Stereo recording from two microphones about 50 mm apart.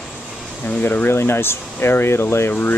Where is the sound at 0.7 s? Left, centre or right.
Left.